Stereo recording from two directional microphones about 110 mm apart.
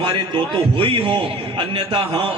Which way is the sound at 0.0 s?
55° right (ahead or behind).